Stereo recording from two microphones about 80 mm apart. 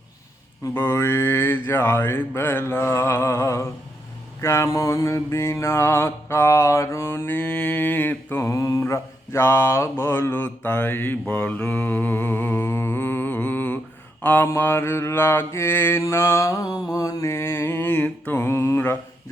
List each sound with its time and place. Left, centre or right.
0.7 s mantra: left
7.3 s mantra: centre
8.4 s mantra: left
14.2 s speech: left
14.4 s mantra: left